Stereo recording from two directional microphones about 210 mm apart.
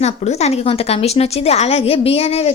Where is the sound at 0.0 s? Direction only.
30° left (ahead or behind).